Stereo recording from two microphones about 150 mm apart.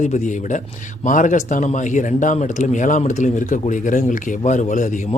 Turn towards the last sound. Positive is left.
turn(degrees=60)  # may be behind; listen again after turning